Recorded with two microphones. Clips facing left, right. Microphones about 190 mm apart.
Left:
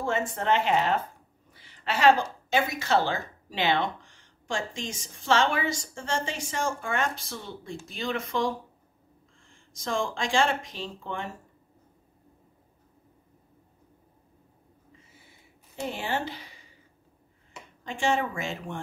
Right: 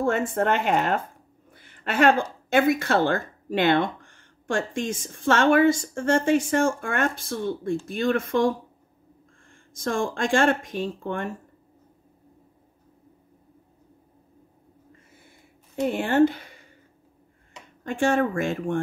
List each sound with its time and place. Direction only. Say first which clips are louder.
0.0 s speech: right 6 dB; 55° right (ahead or behind)
1.5 s a sound: right 2 dB; 55° right (ahead or behind)
2.5 s speech: right 5 dB; 55° right (ahead or behind)
15.7 s speech: right 8 dB; 55° right (ahead or behind)
17.8 s speech: right 5 dB; 55° right (ahead or behind)